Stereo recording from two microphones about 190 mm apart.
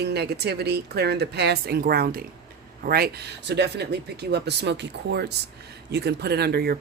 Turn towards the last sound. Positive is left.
turn(degrees=-55)  # may be behind; listen again after turning